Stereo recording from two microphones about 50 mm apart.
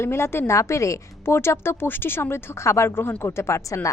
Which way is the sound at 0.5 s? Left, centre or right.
Left.